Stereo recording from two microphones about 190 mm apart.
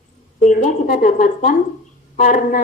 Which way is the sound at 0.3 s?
45° left (ahead or behind).